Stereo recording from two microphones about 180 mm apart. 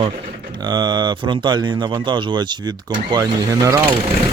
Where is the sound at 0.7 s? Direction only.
25° right (ahead or behind).